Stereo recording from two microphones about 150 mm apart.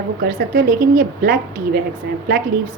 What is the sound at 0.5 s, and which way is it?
Speech, 70° right (ahead or behind).